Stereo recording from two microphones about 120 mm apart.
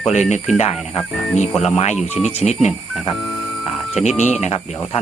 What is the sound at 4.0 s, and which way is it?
Speech, 70° left (ahead or behind).